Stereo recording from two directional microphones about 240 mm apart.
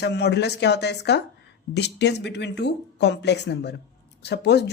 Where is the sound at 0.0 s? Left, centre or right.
Left.